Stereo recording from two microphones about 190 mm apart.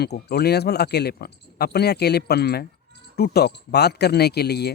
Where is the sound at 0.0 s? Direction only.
60° left (ahead or behind).